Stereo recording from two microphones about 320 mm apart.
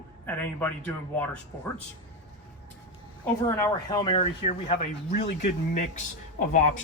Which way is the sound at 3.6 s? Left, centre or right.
Centre.